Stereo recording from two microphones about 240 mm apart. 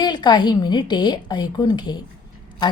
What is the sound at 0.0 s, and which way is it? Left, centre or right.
A woman's voice, centre.